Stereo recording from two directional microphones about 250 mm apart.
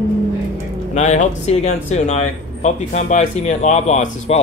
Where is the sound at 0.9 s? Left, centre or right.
Left.